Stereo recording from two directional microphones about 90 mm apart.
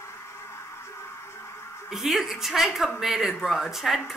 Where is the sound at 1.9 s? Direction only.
5° right (ahead or behind).